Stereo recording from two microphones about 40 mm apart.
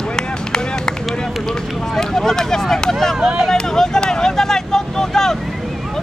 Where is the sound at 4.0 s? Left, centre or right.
Centre.